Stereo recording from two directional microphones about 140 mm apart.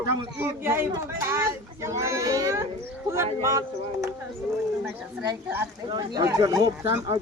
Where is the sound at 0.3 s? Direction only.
15° right (ahead or behind).